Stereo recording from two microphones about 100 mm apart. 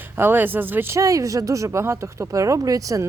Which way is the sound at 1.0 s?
35° right (ahead or behind).